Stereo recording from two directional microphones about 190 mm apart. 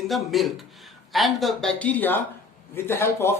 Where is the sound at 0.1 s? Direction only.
Centre (ahead or behind).